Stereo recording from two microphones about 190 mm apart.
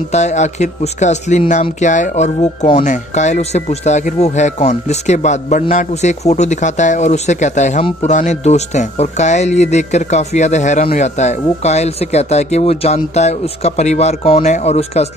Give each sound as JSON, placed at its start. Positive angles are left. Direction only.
{"t": 0.1, "sound": "speech", "side_deg": 35}